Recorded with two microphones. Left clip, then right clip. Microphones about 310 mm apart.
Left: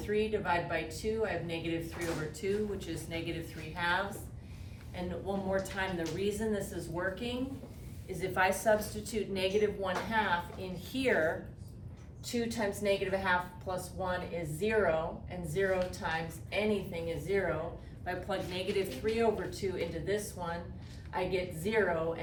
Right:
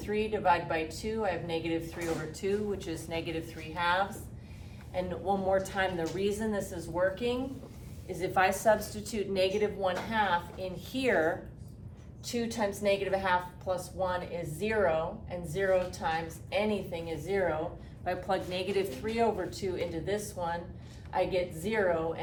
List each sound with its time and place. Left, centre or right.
0.1 s a woman's voice: centre
4.9 s a woman's voice: centre
12.2 s a woman's voice: centre